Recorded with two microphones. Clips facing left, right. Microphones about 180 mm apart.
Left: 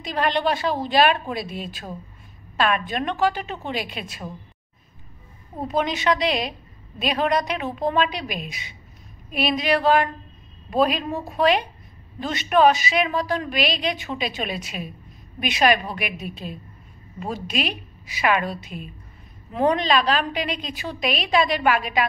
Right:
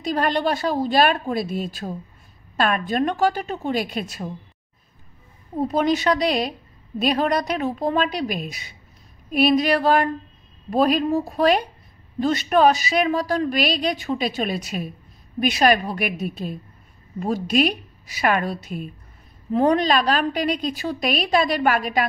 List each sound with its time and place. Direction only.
0.0 s a woman's voice: 40° right (ahead or behind)
5.7 s a woman's voice: 40° right (ahead or behind)